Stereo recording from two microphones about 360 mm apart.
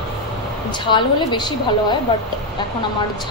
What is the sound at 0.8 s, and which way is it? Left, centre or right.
A woman's voice, centre.